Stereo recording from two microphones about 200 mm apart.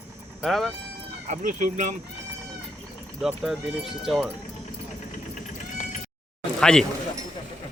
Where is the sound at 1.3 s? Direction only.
40° right (ahead or behind).